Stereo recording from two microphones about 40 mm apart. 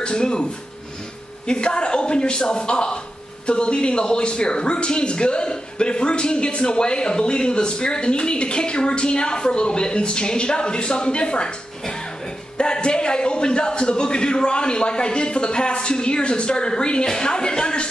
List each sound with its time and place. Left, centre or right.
0.0 s speech: left
1.5 s speech: left